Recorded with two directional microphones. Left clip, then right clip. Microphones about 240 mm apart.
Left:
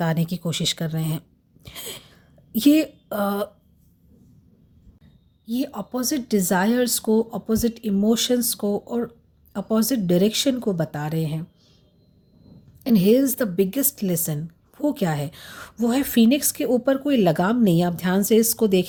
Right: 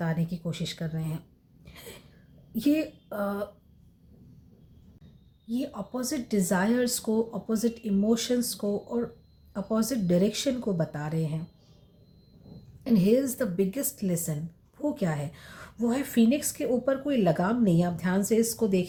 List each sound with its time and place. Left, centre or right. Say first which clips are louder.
0.0 s speech: left 8 dB; left
1.6 s a sound: left 10 dB; left
2.6 s a woman's voice: left 8 dB; left
5.5 s a woman's voice: left 6 dB; left
12.8 s a woman's voice: left 6 dB; left